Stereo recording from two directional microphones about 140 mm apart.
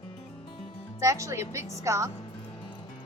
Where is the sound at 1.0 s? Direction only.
20° right (ahead or behind).